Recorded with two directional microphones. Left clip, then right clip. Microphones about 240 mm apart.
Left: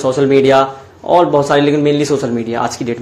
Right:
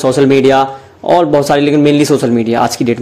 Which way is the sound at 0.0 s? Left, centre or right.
Right.